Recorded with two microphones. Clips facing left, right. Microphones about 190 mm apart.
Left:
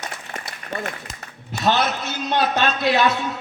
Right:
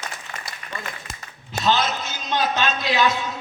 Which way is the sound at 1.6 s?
60° left (ahead or behind).